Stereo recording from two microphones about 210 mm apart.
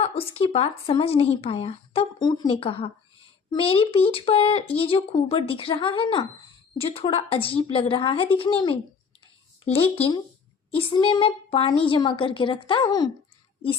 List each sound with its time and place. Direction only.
0.0 s speech: 25° left (ahead or behind)